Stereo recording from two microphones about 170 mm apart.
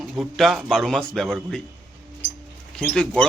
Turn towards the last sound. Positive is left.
turn(degrees=5)  # may be behind; listen again after turning